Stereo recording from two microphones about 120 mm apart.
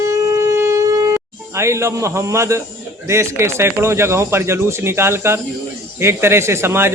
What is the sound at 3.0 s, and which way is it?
Speech, 25° right (ahead or behind).